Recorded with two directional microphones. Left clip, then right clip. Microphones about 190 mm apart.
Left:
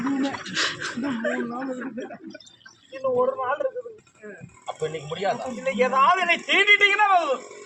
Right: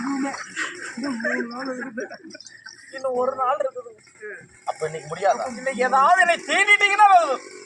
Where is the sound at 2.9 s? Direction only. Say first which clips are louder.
Even; 5° left (ahead or behind).